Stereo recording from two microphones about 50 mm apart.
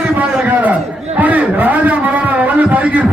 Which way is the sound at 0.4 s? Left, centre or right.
Right.